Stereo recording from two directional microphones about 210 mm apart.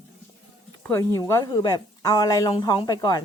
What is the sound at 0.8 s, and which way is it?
A woman's voice, 15° left (ahead or behind).